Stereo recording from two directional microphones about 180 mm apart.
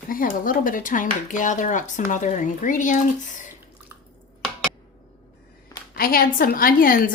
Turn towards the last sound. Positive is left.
turn(degrees=50)  # may be behind; listen again after turning